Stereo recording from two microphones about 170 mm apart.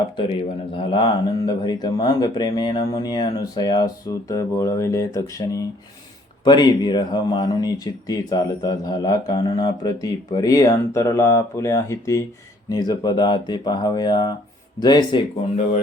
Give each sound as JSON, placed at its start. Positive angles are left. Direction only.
{"t": 0.7, "sound": "speech", "side_deg": 30}